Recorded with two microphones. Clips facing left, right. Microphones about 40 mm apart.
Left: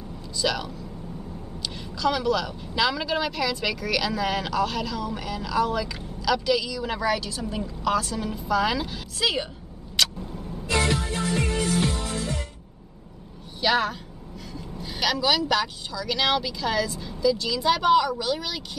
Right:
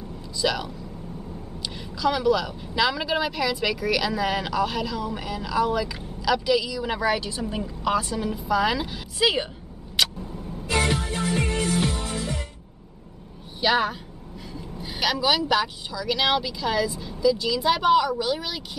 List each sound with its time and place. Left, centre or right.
0.4 s a woman's voice: centre
9.2 s a woman's voice: centre
10.0 s vehicle: centre
10.3 s music: centre
13.6 s a woman's voice: centre